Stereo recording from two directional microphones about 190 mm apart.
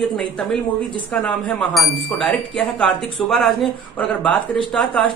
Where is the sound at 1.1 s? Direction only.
5° left (ahead or behind).